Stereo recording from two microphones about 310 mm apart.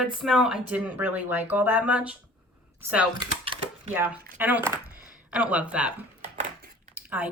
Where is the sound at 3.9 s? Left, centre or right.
Centre.